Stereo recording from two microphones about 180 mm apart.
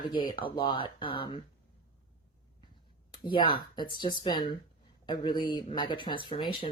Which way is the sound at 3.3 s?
25° left (ahead or behind).